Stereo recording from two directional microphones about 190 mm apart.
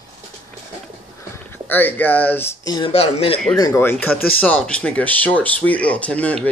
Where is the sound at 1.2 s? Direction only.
10° left (ahead or behind); by 3.4 s 30° left (ahead or behind).